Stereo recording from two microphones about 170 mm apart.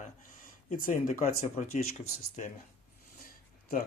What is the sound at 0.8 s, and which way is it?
Speech, 55° left (ahead or behind).